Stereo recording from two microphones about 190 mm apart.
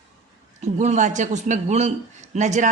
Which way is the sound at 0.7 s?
40° right (ahead or behind).